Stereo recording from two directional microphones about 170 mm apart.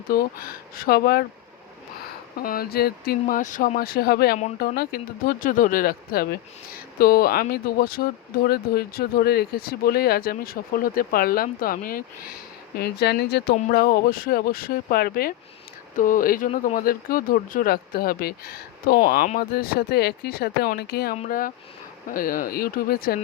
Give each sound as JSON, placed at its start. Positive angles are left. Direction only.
{"t": 0.1, "sound": "speech", "side_deg": 60}
{"t": 2.4, "sound": "speech", "side_deg": 60}
{"t": 12.7, "sound": "speech", "side_deg": 75}
{"t": 21.2, "sound": "speech", "side_deg": 55}